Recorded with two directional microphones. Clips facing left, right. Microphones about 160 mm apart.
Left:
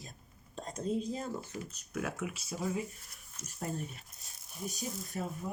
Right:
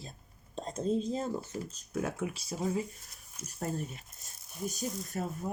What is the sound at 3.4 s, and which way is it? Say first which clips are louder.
Speech: right 3 dB; 10° right (ahead or behind).